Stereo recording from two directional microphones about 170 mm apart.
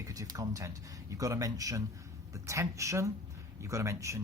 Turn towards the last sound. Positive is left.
turn(degrees=-15)  # may be behind; listen again after turning